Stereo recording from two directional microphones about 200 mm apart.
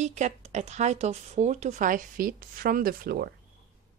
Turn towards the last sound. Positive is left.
turn(degrees=-50)  # may be behind; listen again after turning